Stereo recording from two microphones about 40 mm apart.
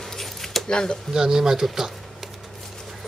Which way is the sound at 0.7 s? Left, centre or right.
Centre.